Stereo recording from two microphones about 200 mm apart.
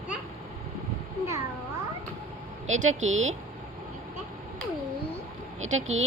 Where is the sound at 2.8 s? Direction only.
80° right.